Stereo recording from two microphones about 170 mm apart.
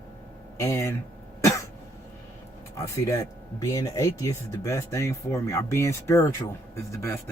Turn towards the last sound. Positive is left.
turn(degrees=15)  # may be behind; listen again after turning